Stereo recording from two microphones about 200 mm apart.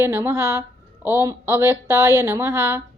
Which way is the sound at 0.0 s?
15° right (ahead or behind).